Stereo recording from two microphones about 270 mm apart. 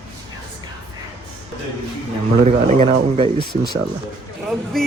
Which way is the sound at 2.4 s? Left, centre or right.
Right.